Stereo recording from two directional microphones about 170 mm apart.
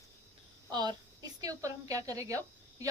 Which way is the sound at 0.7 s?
25° right (ahead or behind).